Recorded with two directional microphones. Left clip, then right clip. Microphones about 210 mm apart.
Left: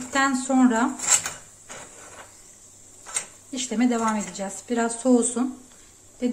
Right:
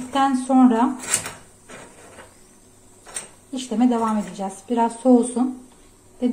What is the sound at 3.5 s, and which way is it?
A woman's voice, 15° left (ahead or behind).